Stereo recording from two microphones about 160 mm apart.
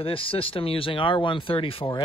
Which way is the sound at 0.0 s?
35° left (ahead or behind).